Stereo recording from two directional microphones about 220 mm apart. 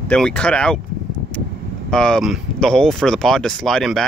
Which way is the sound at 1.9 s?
5° left (ahead or behind).